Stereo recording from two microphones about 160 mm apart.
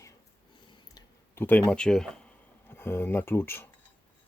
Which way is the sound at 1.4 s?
10° left (ahead or behind).